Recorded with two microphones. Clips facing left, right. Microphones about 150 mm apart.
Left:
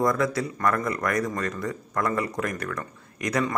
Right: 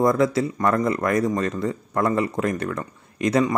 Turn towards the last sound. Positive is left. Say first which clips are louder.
# right 6 dB
turn(degrees=-25)  # may be behind; listen again after turning